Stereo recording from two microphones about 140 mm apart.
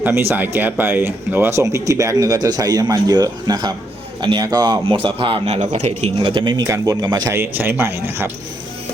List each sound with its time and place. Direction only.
0.0 s a man's voice: 15° right (ahead or behind)
4.9 s a man's voice: 40° right (ahead or behind)
5.7 s speech: 50° right (ahead or behind)
6.1 s a man's voice: 35° right (ahead or behind)
7.3 s speech: 15° right (ahead or behind)